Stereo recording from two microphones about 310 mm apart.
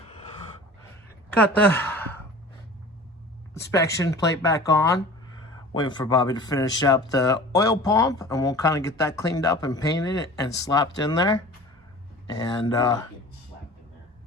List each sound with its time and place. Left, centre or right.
1.3 s sigh: centre
3.7 s speech: centre
12.4 s speech: centre